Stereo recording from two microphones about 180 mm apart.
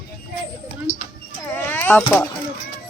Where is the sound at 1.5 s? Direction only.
10° left (ahead or behind).